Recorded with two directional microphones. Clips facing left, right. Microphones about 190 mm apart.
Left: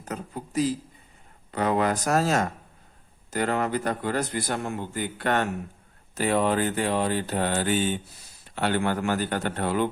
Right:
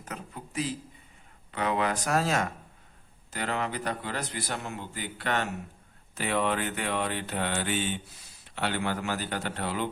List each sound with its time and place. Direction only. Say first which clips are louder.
0.0 s a sound: left 6 dB; 40° left (ahead or behind)
1.5 s mantra: left 4 dB; 40° left (ahead or behind)
3.2 s a man's voice: left 6 dB; 45° left (ahead or behind)
6.1 s mantra: left 5 dB; 40° left (ahead or behind)
8.5 s a man's voice: left 5 dB; 45° left (ahead or behind)